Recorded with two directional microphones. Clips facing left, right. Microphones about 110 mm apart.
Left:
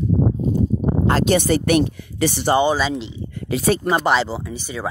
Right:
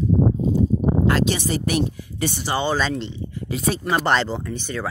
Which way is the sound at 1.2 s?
60° left (ahead or behind).